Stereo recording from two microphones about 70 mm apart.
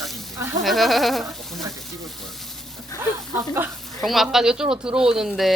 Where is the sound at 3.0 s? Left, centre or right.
Right.